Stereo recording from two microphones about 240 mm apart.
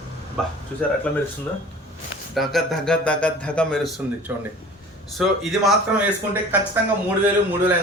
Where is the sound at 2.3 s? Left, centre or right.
Centre.